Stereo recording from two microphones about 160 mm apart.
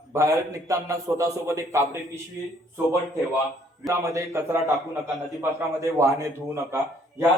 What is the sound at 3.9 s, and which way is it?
Speech, 20° right (ahead or behind).